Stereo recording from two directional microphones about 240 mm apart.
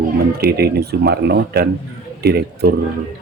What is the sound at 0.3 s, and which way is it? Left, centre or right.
Speech, right.